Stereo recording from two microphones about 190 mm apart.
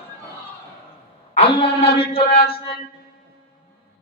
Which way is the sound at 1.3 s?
30° left (ahead or behind).